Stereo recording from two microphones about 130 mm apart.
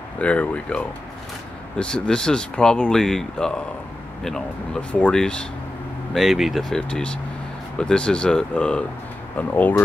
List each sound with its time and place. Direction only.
0.2 s speech: 10° left (ahead or behind)